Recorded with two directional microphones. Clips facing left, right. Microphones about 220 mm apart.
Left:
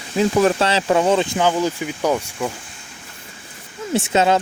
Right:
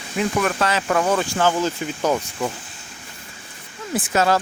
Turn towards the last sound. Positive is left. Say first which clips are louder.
# left 3 dB
turn(degrees=20)  # may be behind; listen again after turning